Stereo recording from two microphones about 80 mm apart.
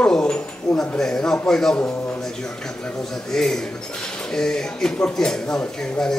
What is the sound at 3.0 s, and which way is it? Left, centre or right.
A man's voice, centre.